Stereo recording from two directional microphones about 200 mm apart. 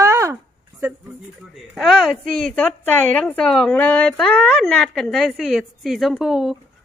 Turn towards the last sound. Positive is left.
turn(degrees=0)  # may be behind; listen again after turning